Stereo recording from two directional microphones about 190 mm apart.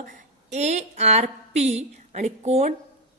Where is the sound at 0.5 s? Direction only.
35° right (ahead or behind).